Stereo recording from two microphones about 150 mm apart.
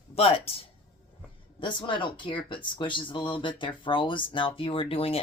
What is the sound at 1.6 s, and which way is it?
Speech, 30° left (ahead or behind).